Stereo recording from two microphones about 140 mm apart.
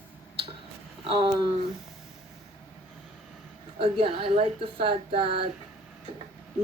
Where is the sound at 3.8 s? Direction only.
40° right (ahead or behind).